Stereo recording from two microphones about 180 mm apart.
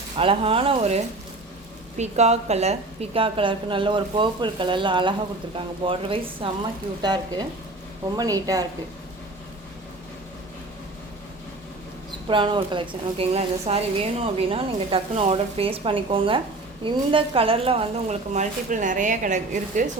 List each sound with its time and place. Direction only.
0.2 s a woman's voice: 30° right (ahead or behind)
2.0 s a woman's voice: 40° right (ahead or behind); by 8.6 s 20° right (ahead or behind)
12.3 s a woman's voice: 25° right (ahead or behind); by 19.8 s 45° right (ahead or behind)